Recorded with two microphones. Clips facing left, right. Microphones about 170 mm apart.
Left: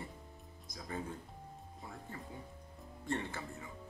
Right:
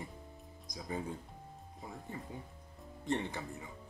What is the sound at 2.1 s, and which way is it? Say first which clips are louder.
Speech: right 2 dB; 20° right (ahead or behind).